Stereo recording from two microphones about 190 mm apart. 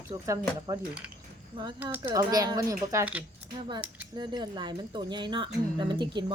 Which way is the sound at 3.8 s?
10° right (ahead or behind).